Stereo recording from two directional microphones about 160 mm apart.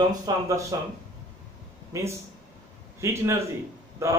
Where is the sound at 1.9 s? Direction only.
20° right (ahead or behind).